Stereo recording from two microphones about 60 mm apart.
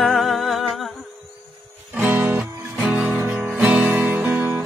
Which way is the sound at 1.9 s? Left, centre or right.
Right.